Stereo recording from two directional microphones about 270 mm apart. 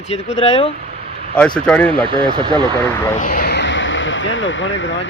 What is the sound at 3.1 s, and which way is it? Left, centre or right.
Speech, left.